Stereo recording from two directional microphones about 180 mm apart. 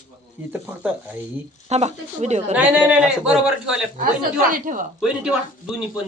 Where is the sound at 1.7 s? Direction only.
40° right (ahead or behind).